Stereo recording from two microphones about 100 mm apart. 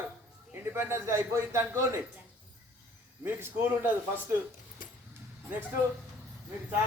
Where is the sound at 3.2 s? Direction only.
25° right (ahead or behind).